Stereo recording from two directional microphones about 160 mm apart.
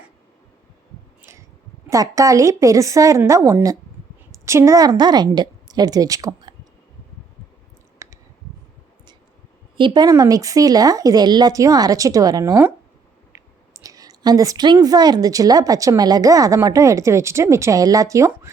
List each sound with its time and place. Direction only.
1.2 s a sound: 20° right (ahead or behind)
1.9 s a woman's voice: 20° right (ahead or behind)
8.0 s clicking: 20° right (ahead or behind)
9.7 s a woman's voice: 30° right (ahead or behind)